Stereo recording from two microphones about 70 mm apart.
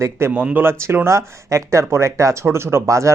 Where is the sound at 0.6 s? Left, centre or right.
Right.